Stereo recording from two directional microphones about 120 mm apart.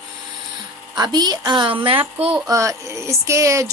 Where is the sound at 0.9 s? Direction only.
35° right (ahead or behind).